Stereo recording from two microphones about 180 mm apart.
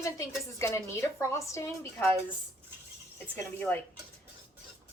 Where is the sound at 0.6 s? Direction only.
15° left (ahead or behind).